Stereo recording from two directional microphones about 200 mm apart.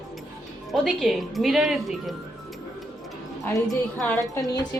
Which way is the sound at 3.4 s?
10° left (ahead or behind).